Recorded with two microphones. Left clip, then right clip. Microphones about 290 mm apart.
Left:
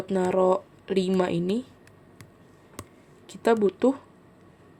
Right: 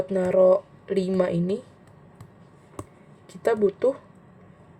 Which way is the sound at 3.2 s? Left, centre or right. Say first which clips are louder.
Even; left.